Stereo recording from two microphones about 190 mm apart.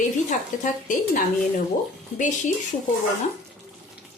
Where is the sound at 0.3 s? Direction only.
40° left (ahead or behind).